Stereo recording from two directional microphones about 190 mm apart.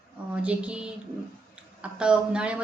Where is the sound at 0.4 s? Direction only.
5° right (ahead or behind).